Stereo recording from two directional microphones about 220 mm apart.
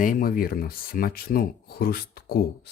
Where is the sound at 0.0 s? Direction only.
40° left (ahead or behind).